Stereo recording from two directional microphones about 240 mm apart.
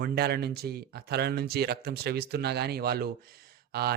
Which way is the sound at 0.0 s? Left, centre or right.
Right.